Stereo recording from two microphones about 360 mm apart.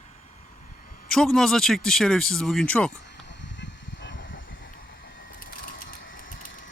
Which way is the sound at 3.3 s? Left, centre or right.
Left.